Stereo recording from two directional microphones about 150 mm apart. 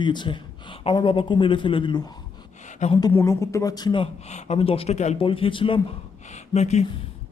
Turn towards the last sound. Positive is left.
turn(degrees=45)  # may be behind; listen again after turning